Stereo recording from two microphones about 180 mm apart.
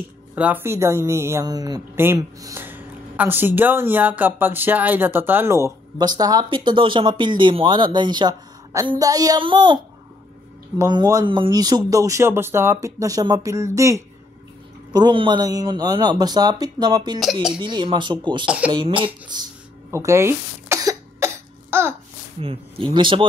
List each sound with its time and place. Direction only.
0.3 s speech: 10° right (ahead or behind); by 9.8 s 25° right (ahead or behind)
10.8 s speech: 20° right (ahead or behind)
17.2 s speech: centre (ahead or behind)
17.6 s speech: 25° right (ahead or behind)
19.9 s cough: 15° right (ahead or behind)
22.4 s speech: 30° right (ahead or behind)